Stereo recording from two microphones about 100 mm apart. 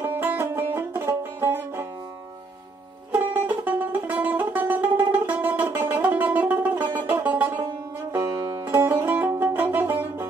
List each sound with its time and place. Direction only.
0.0 s music: 20° right (ahead or behind)
3.1 s music: 20° right (ahead or behind)
8.1 s music: 30° right (ahead or behind)